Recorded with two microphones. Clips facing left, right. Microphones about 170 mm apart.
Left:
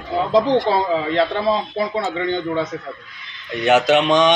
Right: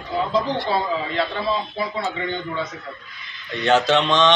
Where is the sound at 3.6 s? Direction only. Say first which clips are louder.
Left 3 dB; 15° left (ahead or behind).